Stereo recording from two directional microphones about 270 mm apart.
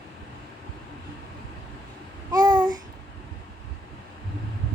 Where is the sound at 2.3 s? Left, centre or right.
Centre.